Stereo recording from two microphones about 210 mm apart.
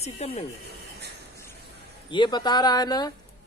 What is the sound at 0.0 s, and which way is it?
Speech, 30° left (ahead or behind).